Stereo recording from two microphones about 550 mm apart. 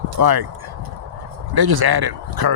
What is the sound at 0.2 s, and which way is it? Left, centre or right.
Speech, right.